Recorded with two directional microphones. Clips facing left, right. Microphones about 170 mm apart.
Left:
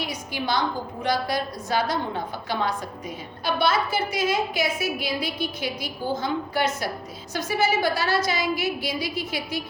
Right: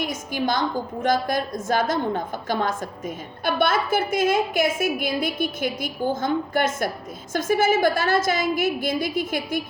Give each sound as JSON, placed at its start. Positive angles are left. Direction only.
{"t": 0.0, "sound": "a woman's voice", "side_deg": -50}